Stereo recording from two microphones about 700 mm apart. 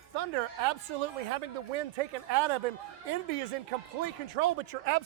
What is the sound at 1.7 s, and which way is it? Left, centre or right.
Speech, right.